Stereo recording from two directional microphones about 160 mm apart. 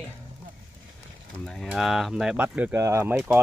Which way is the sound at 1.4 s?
Centre (ahead or behind).